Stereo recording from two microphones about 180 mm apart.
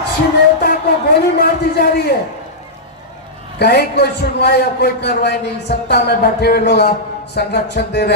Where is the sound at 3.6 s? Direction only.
65° left (ahead or behind).